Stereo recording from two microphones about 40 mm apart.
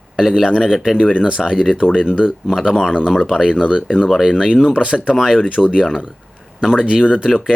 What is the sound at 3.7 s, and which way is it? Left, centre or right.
Speech, right.